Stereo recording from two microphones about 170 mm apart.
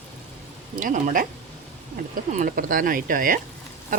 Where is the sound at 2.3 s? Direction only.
50° right (ahead or behind).